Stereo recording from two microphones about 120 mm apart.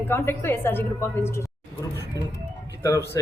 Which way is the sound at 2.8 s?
20° left (ahead or behind).